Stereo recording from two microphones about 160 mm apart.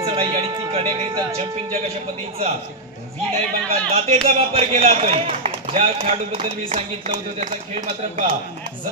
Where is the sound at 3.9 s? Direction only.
40° right (ahead or behind).